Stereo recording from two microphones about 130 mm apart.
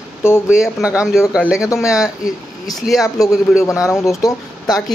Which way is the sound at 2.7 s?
Centre (ahead or behind).